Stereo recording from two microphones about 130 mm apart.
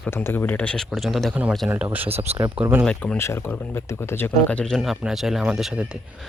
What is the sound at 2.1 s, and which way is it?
Speech, 50° right (ahead or behind).